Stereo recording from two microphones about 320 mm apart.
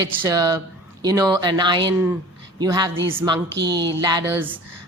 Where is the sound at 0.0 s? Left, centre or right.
Centre.